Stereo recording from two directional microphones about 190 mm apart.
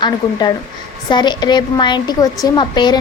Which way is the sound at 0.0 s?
20° left (ahead or behind).